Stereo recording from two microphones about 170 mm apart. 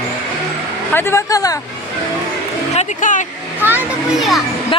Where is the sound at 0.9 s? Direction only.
15° left (ahead or behind).